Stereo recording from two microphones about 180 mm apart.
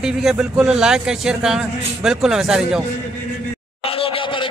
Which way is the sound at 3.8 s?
30° left (ahead or behind).